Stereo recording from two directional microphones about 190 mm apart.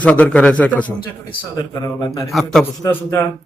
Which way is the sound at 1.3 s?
20° left (ahead or behind).